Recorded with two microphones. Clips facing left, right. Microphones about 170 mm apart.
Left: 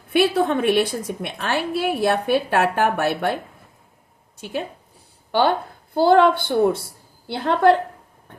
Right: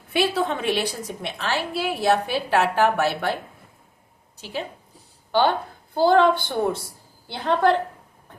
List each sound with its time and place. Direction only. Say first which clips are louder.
0.1 s a woman's voice: left 4 dB; 55° left (ahead or behind)
4.4 s a woman's voice: left 3 dB; 50° left (ahead or behind)
6.0 s a woman's voice: left 2 dB; 55° left (ahead or behind)